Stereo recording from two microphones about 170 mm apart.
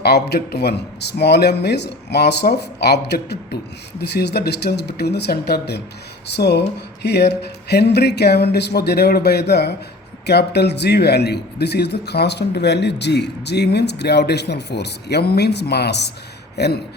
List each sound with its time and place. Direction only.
0.0 s speech: 70° left (ahead or behind)